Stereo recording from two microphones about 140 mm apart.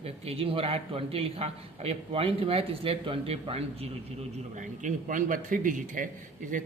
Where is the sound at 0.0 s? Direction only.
45° right (ahead or behind).